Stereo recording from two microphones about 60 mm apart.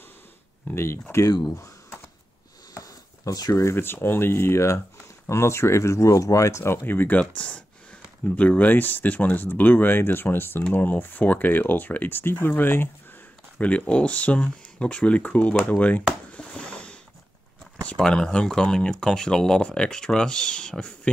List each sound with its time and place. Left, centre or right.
1.1 s speech: left
2.7 s a sound: left
3.7 s speech: left
7.2 s speech: left
13.6 s speech: left
16.3 s a sound: centre
17.8 s speech: centre